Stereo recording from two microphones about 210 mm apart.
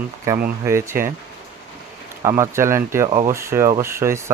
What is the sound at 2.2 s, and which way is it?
Speech, 15° right (ahead or behind).